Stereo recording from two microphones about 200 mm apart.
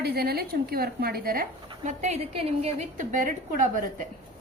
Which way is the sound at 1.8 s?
35° right (ahead or behind).